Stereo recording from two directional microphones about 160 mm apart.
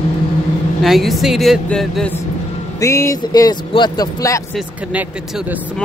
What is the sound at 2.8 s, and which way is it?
Speech, 15° left (ahead or behind).